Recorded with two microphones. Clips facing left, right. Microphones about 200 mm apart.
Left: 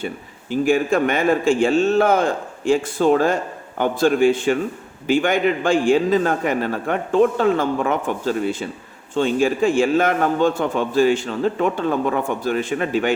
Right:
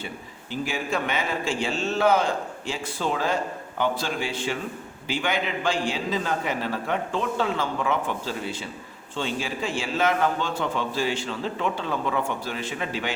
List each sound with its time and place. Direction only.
0.5 s a man's voice: 50° left (ahead or behind)